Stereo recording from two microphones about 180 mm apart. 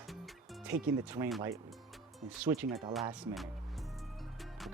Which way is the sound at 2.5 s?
15° right (ahead or behind).